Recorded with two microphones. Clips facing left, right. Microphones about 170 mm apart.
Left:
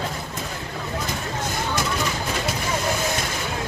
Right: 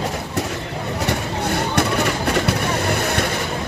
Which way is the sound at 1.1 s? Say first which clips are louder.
Right 6 dB; 65° right (ahead or behind).